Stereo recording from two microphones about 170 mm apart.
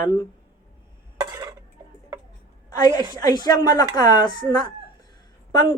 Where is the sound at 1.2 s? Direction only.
20° right (ahead or behind).